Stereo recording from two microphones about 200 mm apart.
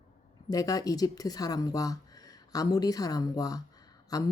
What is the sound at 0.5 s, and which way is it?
Speech, 20° left (ahead or behind).